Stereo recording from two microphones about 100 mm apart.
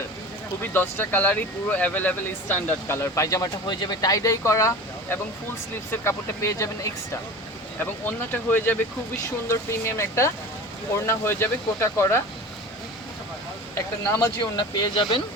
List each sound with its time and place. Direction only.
0.6 s speech: 20° left (ahead or behind)
3.0 s speech: 30° left (ahead or behind)
8.0 s speech: 20° left (ahead or behind)
13.7 s speech: 30° left (ahead or behind)